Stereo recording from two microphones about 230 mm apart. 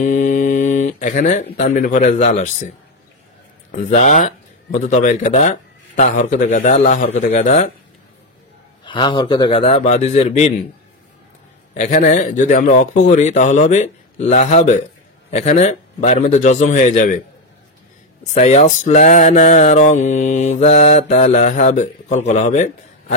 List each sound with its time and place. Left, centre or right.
0.0 s speech: left
3.7 s speech: left
7.2 s mantra: left
8.8 s speech: left
11.7 s mantra: left
18.3 s mantra: left